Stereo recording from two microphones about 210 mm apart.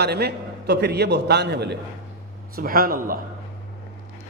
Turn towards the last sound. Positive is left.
turn(degrees=-45)  # may be behind; listen again after turning